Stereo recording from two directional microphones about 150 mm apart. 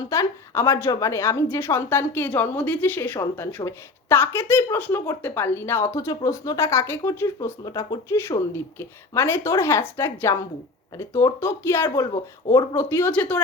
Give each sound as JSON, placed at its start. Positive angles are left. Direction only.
{"t": 0.1, "sound": "a woman's voice", "side_deg": 20}